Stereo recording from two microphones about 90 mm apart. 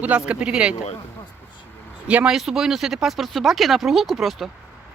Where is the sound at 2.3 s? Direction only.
5° right (ahead or behind).